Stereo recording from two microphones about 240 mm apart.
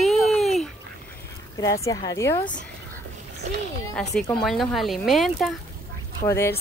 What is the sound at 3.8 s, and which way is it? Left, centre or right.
Speech, centre.